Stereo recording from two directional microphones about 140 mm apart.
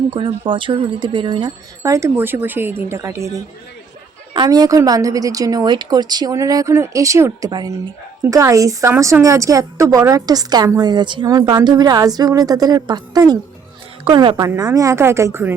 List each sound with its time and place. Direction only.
0.1 s a woman's voice: 35° right (ahead or behind); by 15.5 s 20° right (ahead or behind)